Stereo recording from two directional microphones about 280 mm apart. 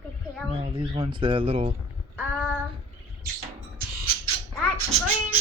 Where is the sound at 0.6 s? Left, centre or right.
Right.